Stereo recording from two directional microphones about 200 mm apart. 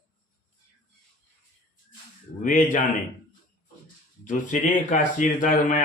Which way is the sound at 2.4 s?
40° left (ahead or behind).